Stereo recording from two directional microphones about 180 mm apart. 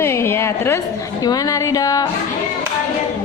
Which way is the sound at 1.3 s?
20° left (ahead or behind).